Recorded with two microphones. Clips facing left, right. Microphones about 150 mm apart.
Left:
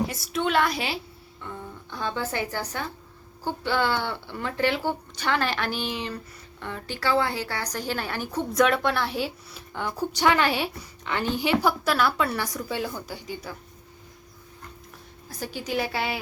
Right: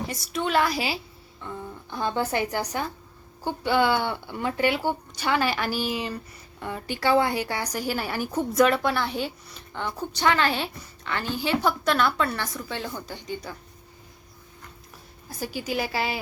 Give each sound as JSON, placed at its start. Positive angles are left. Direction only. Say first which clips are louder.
{"t": 0.1, "sound": "a woman's voice", "louder": "even", "side_deg": 0}
{"t": 1.9, "sound": "a woman's voice", "louder": "right 4 dB", "side_deg": -15}
{"t": 15.4, "sound": "a woman's voice", "louder": "even", "side_deg": -5}